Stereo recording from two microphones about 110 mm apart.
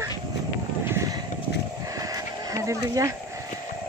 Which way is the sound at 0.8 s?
30° right (ahead or behind).